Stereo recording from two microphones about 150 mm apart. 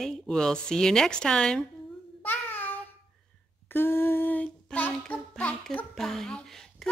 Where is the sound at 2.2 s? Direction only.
15° left (ahead or behind).